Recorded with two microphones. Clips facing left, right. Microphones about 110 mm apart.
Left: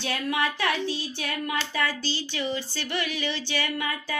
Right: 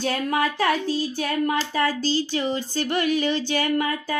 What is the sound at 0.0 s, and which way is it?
Speech, 40° right (ahead or behind).